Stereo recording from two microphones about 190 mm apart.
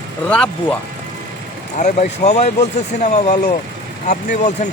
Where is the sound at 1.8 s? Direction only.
40° left (ahead or behind).